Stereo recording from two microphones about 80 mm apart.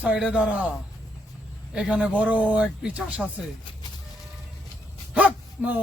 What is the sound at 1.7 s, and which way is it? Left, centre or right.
Speech, centre.